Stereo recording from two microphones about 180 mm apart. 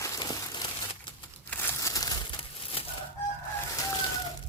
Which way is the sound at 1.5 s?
10° left (ahead or behind).